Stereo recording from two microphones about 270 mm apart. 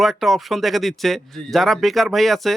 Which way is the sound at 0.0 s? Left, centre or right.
Centre.